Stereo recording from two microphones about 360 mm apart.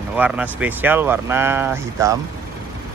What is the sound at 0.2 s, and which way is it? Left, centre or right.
Speech, centre.